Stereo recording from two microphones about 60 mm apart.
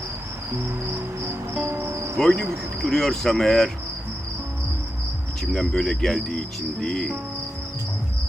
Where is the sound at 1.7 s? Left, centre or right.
Right.